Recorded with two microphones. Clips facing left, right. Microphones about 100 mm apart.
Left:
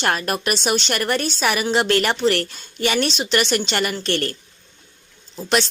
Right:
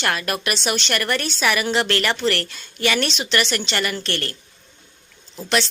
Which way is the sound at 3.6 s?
40° left (ahead or behind).